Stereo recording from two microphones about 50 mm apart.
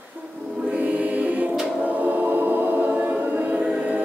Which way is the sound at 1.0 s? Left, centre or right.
Right.